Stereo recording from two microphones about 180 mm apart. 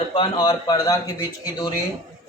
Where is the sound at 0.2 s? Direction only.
25° left (ahead or behind).